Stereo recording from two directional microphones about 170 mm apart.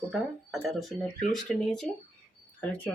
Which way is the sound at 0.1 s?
Centre (ahead or behind).